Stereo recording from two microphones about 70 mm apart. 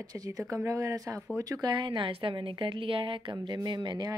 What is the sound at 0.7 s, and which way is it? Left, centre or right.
Speech, right.